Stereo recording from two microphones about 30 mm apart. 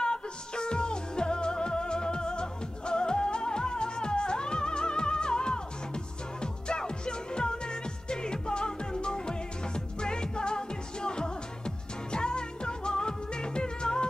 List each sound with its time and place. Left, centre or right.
0.0 s music: left